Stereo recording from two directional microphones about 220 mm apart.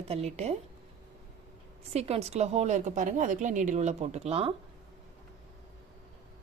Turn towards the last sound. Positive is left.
turn(degrees=-30)  # may be behind; listen again after turning